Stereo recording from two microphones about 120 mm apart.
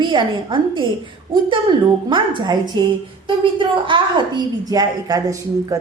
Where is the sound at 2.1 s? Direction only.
40° right (ahead or behind).